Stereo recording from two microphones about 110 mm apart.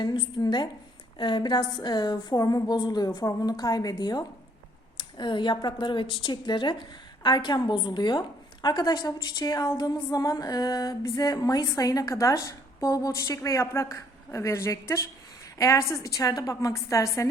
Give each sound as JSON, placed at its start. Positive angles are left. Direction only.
{"t": 0.0, "sound": "a woman's voice", "side_deg": 40}